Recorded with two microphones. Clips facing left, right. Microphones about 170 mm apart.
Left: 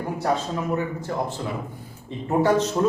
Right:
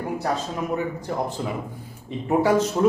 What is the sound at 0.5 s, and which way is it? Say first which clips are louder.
Speech: even; 15° right (ahead or behind).